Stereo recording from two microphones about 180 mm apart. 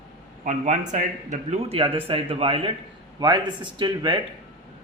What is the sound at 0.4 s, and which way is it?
Speech, 45° right (ahead or behind).